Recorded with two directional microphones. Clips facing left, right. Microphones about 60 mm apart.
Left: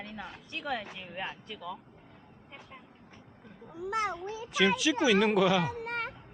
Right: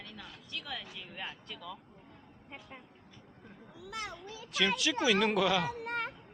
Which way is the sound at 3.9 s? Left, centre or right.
Left.